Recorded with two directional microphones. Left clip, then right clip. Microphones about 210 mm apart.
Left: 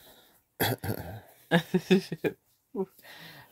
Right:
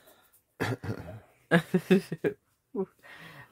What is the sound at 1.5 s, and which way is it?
Speech, 10° right (ahead or behind).